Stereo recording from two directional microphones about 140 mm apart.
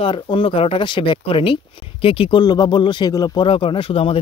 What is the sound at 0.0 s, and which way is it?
Speech, 40° left (ahead or behind).